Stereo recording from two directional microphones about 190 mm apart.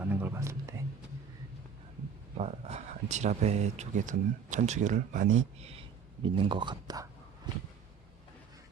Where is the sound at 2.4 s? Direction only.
35° right (ahead or behind).